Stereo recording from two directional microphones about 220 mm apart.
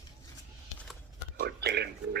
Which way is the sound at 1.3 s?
50° right (ahead or behind).